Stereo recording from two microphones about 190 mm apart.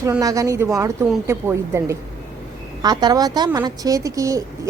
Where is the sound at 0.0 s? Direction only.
15° right (ahead or behind).